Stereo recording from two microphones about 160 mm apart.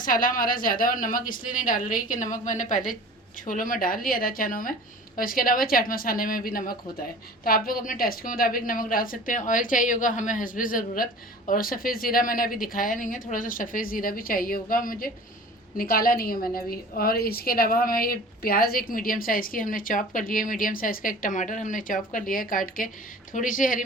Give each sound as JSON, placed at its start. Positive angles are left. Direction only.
{"t": 0.0, "sound": "a woman's voice", "side_deg": 60}